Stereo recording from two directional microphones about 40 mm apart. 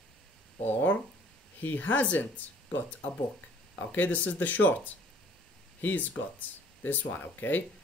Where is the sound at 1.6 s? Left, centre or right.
Left.